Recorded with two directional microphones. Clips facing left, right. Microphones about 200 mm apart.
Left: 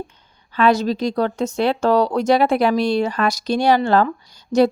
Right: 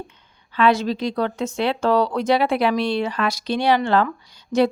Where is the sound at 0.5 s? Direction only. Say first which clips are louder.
Left 2 dB; 40° left (ahead or behind).